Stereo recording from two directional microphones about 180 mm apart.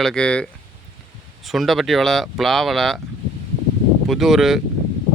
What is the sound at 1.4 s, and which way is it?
Speech, centre (ahead or behind).